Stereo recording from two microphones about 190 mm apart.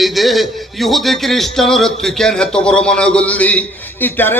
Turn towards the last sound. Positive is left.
turn(degrees=10)  # may be behind; listen again after turning